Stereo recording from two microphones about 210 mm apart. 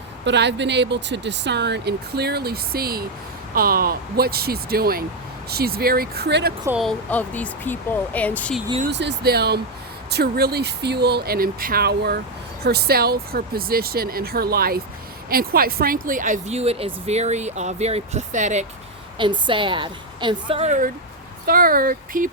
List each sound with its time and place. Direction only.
0.3 s speech: 55° right (ahead or behind)
6.7 s speech: 5° right (ahead or behind)
7.1 s speech: 5° left (ahead or behind)
8.9 s speech: 55° right (ahead or behind); by 18.6 s 35° right (ahead or behind)
19.2 s a woman's voice: 25° right (ahead or behind); by 22.3 s 40° right (ahead or behind)